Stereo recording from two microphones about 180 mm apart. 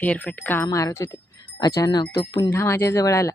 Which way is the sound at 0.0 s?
10° left (ahead or behind).